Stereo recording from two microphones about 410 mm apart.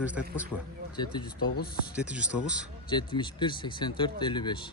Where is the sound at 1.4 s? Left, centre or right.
Left.